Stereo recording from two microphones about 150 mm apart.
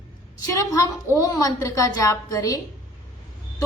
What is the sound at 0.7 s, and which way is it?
A child's voice, 25° left (ahead or behind).